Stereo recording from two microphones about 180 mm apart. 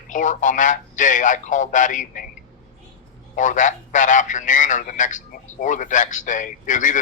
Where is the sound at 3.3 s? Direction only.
45° left (ahead or behind).